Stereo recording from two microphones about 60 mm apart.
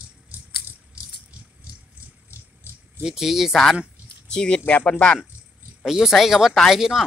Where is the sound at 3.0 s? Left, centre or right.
Centre.